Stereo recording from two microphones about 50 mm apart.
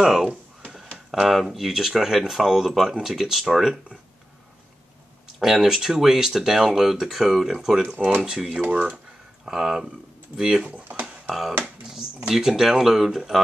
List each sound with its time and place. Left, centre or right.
0.0 s speech: centre
5.4 s speech: centre
7.9 s speech: right
8.3 s speech: centre
8.6 s speech: right
8.9 s a sound: centre
10.3 s speech: centre
10.6 s speech: right
11.2 s speech: centre